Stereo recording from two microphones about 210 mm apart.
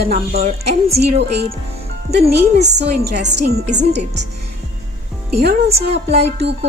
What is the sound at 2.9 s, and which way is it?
Music, 55° right (ahead or behind).